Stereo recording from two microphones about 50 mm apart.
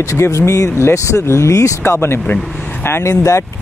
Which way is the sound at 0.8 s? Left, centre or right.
Left.